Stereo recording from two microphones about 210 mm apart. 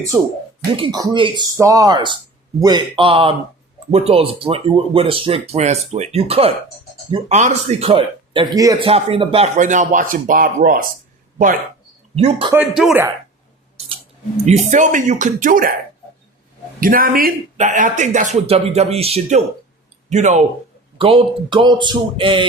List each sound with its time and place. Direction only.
0.1 s speech: 10° right (ahead or behind); by 10.8 s 45° right (ahead or behind)
12.1 s speech: 30° right (ahead or behind)
12.7 s speech: 5° right (ahead or behind)
13.7 s scissors: 25° right (ahead or behind)
14.7 s speech: 35° right (ahead or behind)
16.8 s speech: 40° right (ahead or behind); by 22.4 s 25° right (ahead or behind)